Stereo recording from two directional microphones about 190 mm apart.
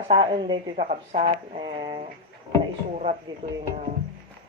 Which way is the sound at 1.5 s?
25° right (ahead or behind).